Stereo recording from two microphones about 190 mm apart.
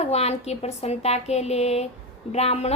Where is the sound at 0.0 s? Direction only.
35° left (ahead or behind).